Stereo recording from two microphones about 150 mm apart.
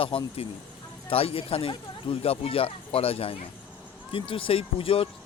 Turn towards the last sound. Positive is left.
turn(degrees=40)  # may be behind; listen again after turning